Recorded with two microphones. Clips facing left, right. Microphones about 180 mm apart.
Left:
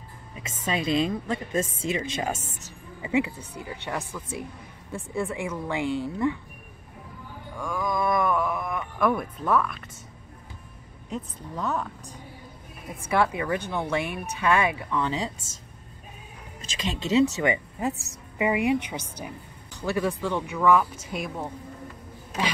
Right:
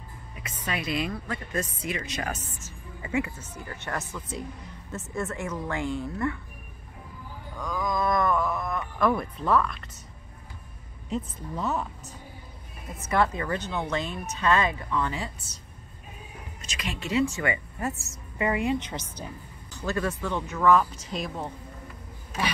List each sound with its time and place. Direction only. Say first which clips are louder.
0.4 s a woman's voice: left 4 dB; 25° left (ahead or behind)
7.5 s wild animals: left 1 dB; 10° left (ahead or behind)
11.1 s a woman's voice: right 3 dB; centre (ahead or behind)
13.1 s speech: left 1 dB; 10° left (ahead or behind)
16.8 s speech: left 4 dB; 20° left (ahead or behind)